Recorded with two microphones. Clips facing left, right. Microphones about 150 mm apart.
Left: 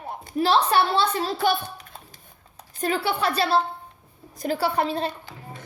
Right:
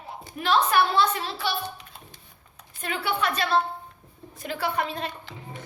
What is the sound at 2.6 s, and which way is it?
A woman's voice, 35° left (ahead or behind).